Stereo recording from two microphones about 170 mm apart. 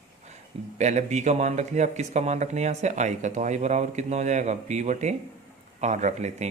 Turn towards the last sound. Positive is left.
turn(degrees=-40)  # may be behind; listen again after turning